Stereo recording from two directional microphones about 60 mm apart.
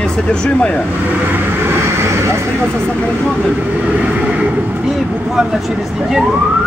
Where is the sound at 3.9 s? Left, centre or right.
Right.